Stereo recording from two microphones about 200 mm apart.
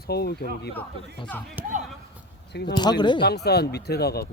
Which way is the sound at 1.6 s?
10° right (ahead or behind).